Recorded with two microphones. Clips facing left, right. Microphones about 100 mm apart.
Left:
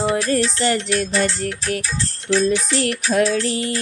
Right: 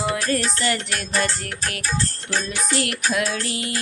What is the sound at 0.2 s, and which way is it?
Music, 45° right (ahead or behind).